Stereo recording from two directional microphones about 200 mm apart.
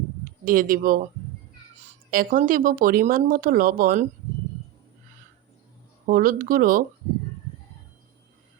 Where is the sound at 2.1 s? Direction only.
45° right (ahead or behind).